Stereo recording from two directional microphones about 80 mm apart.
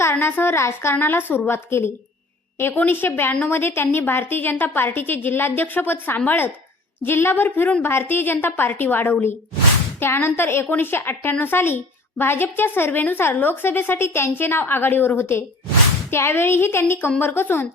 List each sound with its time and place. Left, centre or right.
0.0 s a woman's voice: left